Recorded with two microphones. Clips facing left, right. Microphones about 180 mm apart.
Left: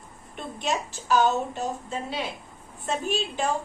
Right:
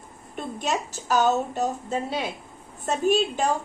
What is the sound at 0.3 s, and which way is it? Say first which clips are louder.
A woman's voice: right 2 dB; 45° right (ahead or behind).